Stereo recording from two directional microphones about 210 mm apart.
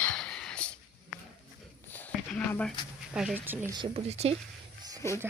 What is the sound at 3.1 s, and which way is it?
Speech, 5° right (ahead or behind).